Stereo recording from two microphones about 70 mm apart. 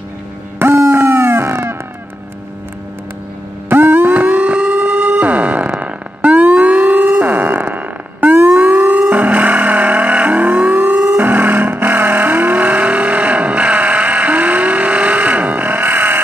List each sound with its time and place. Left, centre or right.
0.6 s dog: right
3.6 s music: right
8.4 s siren: right
11.1 s vehicle: right